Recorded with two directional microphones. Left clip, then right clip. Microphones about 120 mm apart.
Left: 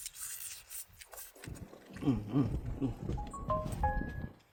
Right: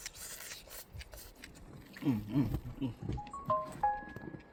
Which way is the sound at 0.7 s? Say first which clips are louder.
Even; 45° left (ahead or behind).